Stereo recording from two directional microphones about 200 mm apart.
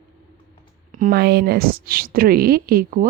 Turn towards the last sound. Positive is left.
turn(degrees=-50)  # may be behind; listen again after turning